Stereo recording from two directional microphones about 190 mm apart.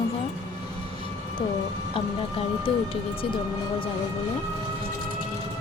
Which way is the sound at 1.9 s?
30° left (ahead or behind).